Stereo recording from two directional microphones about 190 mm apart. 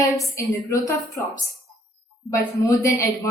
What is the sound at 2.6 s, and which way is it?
Speech, 15° left (ahead or behind).